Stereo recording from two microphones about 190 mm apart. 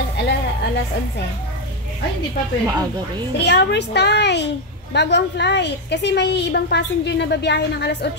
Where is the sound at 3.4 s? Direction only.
60° left (ahead or behind).